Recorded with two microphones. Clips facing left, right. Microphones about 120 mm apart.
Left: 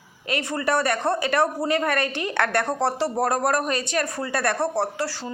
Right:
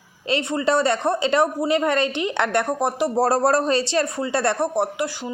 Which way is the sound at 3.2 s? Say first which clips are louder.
Right 6 dB; 30° right (ahead or behind).